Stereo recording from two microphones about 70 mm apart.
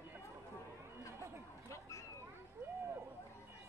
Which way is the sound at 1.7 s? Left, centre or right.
Left.